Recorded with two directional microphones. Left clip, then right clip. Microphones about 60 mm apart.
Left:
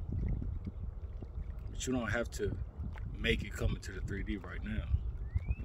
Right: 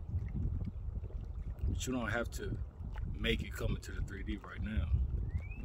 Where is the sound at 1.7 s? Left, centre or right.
Right.